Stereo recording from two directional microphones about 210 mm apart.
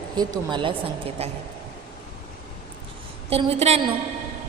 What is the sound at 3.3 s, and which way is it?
Speech, 30° right (ahead or behind).